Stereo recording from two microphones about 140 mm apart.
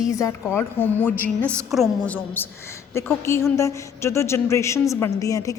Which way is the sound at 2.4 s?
15° left (ahead or behind).